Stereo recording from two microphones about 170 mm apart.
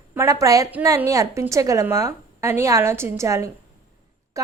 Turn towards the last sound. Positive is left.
turn(degrees=-20)  # may be behind; listen again after turning